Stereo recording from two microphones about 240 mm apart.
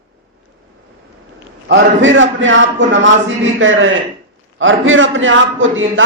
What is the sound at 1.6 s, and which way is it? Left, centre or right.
A man's voice, right.